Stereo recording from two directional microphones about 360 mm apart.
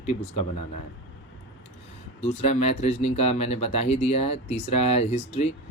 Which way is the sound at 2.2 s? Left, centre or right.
Centre.